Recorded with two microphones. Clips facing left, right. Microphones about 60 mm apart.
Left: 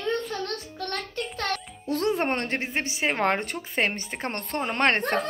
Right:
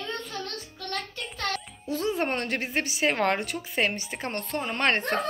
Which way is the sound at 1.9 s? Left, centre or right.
Left.